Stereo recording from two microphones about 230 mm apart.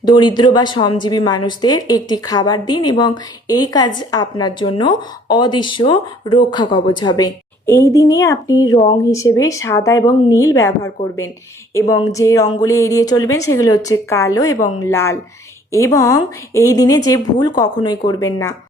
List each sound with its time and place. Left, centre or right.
0.3 s a woman's voice: centre